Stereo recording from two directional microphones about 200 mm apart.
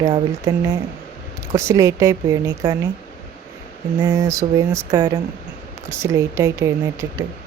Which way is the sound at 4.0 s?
15° right (ahead or behind).